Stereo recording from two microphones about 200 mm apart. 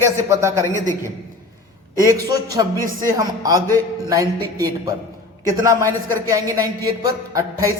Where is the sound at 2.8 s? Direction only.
45° right (ahead or behind).